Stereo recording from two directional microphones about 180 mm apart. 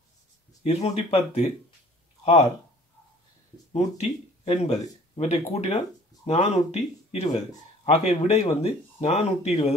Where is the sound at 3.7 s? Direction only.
35° left (ahead or behind).